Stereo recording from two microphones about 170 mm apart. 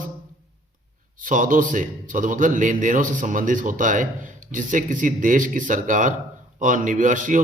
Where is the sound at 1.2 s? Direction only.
50° right (ahead or behind).